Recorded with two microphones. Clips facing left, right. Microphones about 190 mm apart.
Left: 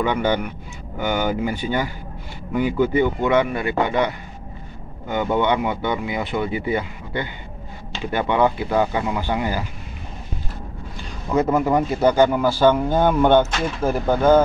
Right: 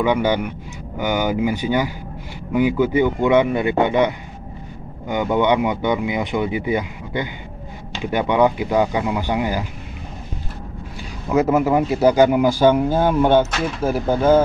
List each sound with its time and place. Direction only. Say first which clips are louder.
0.0 s a man's voice: right 2 dB; 10° right (ahead or behind)
11.2 s a man's voice: right 2 dB; 5° right (ahead or behind)